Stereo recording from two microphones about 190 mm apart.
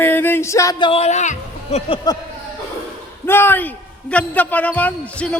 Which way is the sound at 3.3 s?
10° left (ahead or behind).